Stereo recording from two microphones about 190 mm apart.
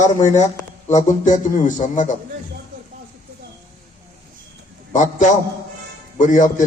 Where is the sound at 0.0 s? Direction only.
40° left (ahead or behind).